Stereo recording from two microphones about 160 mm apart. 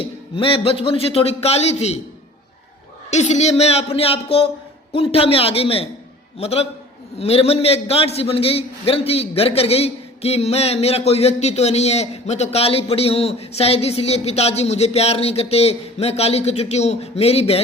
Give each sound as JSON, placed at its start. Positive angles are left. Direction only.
{"t": 0.0, "sound": "a man's voice", "side_deg": 35}
{"t": 3.1, "sound": "a man's voice", "side_deg": 45}